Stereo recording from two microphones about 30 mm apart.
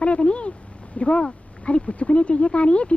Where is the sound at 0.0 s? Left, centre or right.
Left.